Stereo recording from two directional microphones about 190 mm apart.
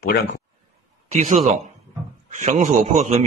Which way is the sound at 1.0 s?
40° right (ahead or behind).